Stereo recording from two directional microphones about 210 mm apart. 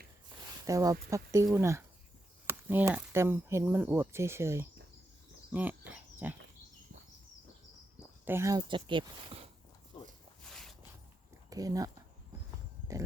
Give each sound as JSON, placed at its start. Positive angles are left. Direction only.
{"t": 0.6, "sound": "speech", "side_deg": -15}
{"t": 8.2, "sound": "speech", "side_deg": -10}
{"t": 10.4, "sound": "a sound", "side_deg": 0}
{"t": 11.4, "sound": "speech", "side_deg": -15}